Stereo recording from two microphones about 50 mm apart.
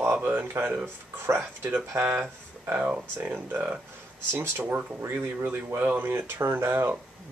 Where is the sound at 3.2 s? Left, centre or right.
Right.